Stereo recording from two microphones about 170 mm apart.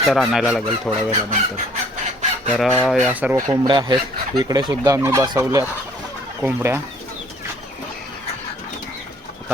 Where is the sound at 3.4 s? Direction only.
25° right (ahead or behind).